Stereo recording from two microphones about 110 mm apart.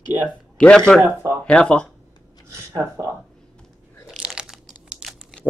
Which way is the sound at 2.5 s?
25° right (ahead or behind).